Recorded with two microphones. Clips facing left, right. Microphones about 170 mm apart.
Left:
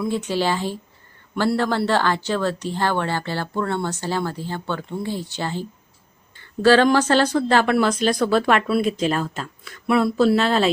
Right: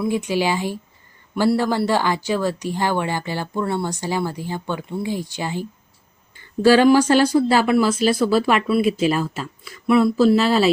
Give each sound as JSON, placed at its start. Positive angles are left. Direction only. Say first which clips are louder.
{"t": 0.0, "sound": "speech", "louder": "right 2 dB", "side_deg": -10}